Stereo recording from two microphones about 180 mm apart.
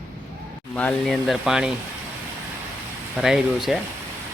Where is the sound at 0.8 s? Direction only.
5° left (ahead or behind).